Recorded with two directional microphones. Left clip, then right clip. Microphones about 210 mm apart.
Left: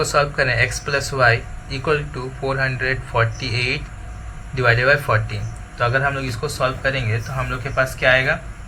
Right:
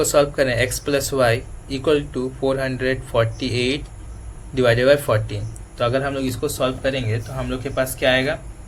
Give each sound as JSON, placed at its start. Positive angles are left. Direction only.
{"t": 0.0, "sound": "speech", "side_deg": -55}